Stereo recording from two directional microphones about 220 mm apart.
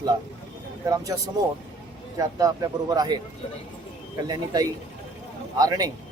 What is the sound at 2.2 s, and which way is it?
Speech, 15° right (ahead or behind).